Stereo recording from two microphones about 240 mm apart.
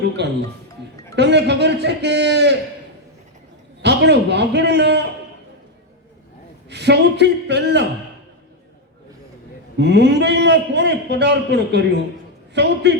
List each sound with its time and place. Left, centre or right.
0.2 s a man's voice: right
3.8 s a man's voice: right
6.7 s a man's voice: right
9.7 s a man's voice: right